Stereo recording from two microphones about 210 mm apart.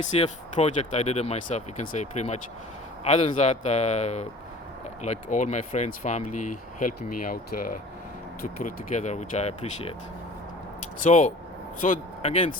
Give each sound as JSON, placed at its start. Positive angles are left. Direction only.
{"t": 0.0, "sound": "speech", "side_deg": 35}
{"t": 11.0, "sound": "speech", "side_deg": 40}